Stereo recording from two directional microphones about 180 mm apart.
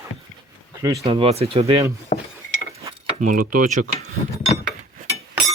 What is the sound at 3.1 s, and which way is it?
Speech, 50° right (ahead or behind).